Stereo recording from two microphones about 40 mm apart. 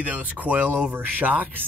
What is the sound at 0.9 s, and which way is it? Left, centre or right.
Speech, right.